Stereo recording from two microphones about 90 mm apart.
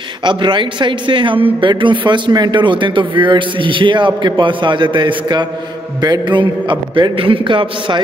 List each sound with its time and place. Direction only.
0.2 s a man's voice: 60° right (ahead or behind)